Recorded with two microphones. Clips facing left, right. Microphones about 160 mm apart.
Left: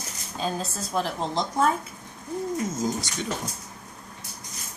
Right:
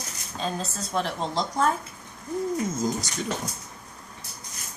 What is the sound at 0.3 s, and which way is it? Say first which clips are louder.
Speech: left 1 dB; 5° left (ahead or behind).